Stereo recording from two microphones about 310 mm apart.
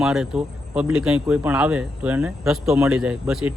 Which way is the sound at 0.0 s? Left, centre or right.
Centre.